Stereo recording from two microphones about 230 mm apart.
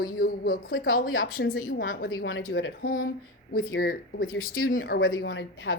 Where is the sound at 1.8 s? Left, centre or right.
Left.